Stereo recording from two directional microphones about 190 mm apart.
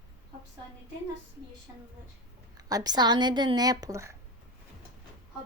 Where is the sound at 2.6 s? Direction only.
20° right (ahead or behind).